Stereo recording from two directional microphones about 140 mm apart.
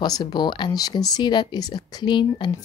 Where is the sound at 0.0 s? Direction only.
30° left (ahead or behind).